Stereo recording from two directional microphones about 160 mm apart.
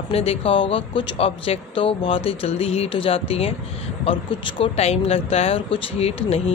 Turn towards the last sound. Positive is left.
turn(degrees=40)  # may be behind; listen again after turning